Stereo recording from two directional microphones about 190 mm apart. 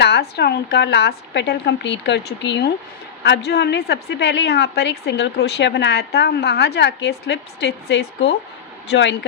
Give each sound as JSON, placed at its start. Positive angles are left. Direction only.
{"t": 0.0, "sound": "a woman's voice", "side_deg": 60}